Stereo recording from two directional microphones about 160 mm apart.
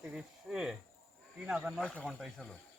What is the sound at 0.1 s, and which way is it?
Speech, centre (ahead or behind).